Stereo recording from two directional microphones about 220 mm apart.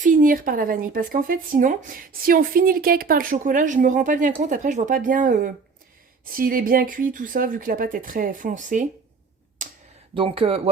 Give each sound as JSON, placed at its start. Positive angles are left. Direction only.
{"t": 0.0, "sound": "speech", "side_deg": -40}
{"t": 9.6, "sound": "a sound", "side_deg": -35}
{"t": 10.2, "sound": "speech", "side_deg": -25}